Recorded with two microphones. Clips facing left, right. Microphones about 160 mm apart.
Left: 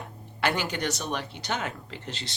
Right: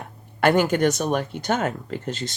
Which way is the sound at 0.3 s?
50° right (ahead or behind).